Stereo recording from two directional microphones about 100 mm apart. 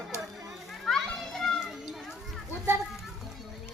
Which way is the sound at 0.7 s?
5° left (ahead or behind).